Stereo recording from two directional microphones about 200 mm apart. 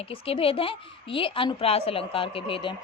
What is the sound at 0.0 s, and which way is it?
A woman's voice, 30° left (ahead or behind).